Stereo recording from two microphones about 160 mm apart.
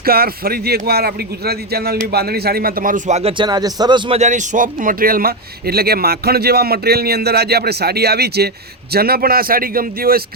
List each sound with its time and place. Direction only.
0.0 s speech: 70° right (ahead or behind); by 3.3 s 45° right (ahead or behind)
3.3 s a man's voice: 25° right (ahead or behind)
4.2 s speech: 50° right (ahead or behind); by 10.2 s 65° right (ahead or behind)